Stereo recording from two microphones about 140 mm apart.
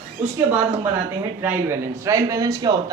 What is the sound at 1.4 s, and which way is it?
Speech, 15° right (ahead or behind).